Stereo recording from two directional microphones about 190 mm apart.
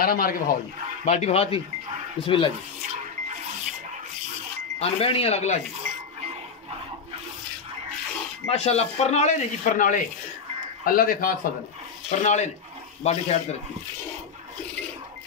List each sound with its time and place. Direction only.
0.0 s speech: 50° left (ahead or behind)
1.0 s speech: 40° left (ahead or behind)
4.7 s speech: 30° left (ahead or behind)
8.5 s speech: 35° left (ahead or behind)